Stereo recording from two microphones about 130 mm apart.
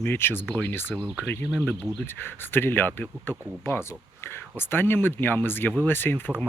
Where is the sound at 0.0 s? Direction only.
15° left (ahead or behind).